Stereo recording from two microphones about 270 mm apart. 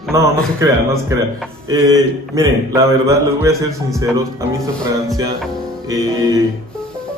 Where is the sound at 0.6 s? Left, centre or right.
Centre.